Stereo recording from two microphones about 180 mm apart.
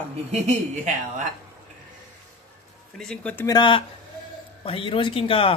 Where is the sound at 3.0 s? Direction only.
5° left (ahead or behind).